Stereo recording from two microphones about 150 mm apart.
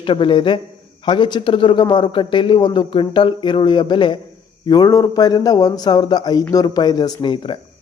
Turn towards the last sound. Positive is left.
turn(degrees=35)  # may be behind; listen again after turning